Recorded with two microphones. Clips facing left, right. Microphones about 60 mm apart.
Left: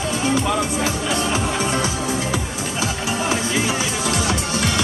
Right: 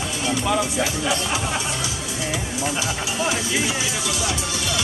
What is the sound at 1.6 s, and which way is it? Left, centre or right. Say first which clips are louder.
Music: left 6 dB; left.